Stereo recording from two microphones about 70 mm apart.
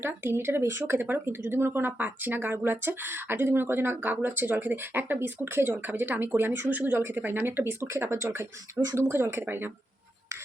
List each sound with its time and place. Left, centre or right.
0.0 s speech: right